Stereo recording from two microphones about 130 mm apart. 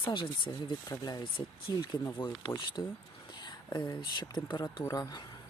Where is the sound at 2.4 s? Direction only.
35° left (ahead or behind).